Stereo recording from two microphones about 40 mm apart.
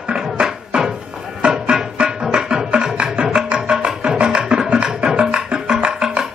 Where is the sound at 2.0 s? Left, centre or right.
Centre.